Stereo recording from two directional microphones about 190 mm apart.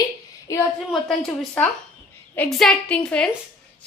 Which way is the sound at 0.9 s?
5° left (ahead or behind).